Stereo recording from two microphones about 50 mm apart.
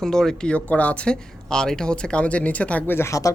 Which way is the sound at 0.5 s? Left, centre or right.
Left.